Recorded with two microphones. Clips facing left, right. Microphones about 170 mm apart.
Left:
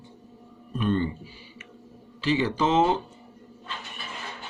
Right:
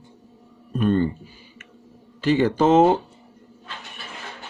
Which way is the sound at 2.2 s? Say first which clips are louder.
Right 6 dB; 50° right (ahead or behind).